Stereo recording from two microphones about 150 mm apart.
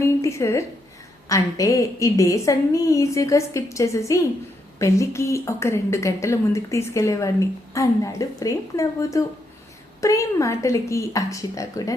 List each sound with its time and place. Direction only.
0.0 s a woman's voice: 20° left (ahead or behind)